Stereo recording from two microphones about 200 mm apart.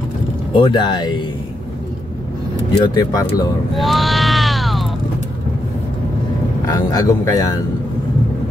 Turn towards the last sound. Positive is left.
turn(degrees=15)  # may be behind; listen again after turning